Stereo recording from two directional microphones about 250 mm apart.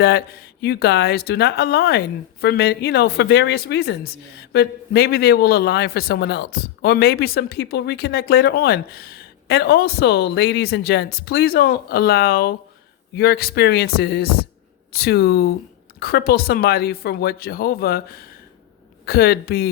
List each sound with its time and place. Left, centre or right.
0.0 s speech: left
19.0 s speech: left